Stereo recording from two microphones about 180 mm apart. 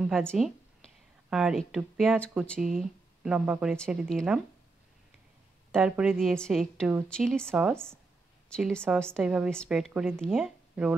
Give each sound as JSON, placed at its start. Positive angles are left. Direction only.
{"t": 0.0, "sound": "a woman's voice", "side_deg": 0}
{"t": 5.7, "sound": "a woman's voice", "side_deg": -5}